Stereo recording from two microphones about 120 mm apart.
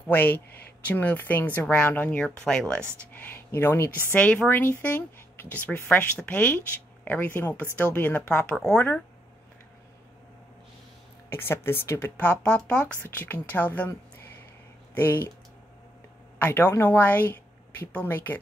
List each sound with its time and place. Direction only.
0.0 s a woman's voice: 15° left (ahead or behind)
11.2 s a woman's voice: 20° left (ahead or behind)
15.0 s a woman's voice: 15° left (ahead or behind)
16.4 s a woman's voice: 20° left (ahead or behind)